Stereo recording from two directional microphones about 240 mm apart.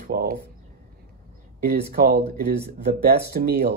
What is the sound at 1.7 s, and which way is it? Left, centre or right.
Speech, right.